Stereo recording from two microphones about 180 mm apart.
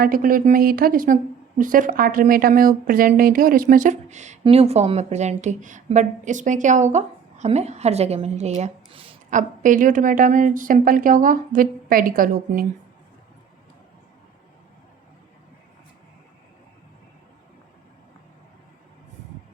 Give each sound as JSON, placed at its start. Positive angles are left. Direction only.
{"t": 0.0, "sound": "a woman's voice", "side_deg": -50}
{"t": 9.3, "sound": "speech", "side_deg": -45}